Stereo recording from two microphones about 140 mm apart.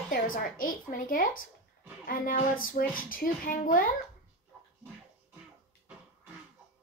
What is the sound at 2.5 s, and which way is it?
A woman's voice, 90° left.